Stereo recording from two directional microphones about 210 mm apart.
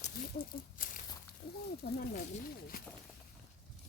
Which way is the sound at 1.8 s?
45° left (ahead or behind).